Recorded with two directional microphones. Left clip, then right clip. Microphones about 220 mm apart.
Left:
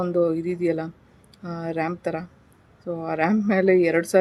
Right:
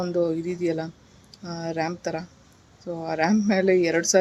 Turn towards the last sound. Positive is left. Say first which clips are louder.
# left 2 dB
turn(degrees=10)  # may be behind; listen again after turning